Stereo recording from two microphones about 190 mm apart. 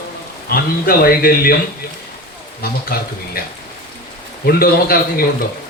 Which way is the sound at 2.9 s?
55° left (ahead or behind).